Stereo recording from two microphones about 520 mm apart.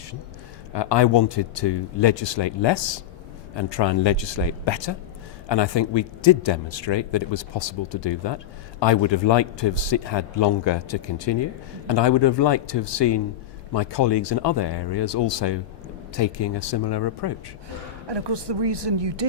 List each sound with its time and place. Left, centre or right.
0.7 s a man's voice: left
18.1 s speech: right